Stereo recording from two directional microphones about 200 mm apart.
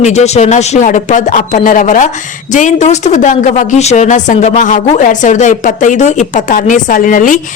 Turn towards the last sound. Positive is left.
turn(degrees=40)  # may be behind; listen again after turning